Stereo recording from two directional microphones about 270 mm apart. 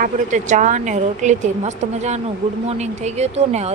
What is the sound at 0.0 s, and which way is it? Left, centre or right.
Speech, right.